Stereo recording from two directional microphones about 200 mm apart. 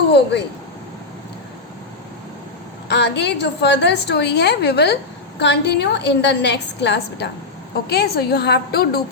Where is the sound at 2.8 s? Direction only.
60° left (ahead or behind).